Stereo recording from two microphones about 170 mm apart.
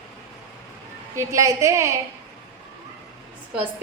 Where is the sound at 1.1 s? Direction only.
20° right (ahead or behind).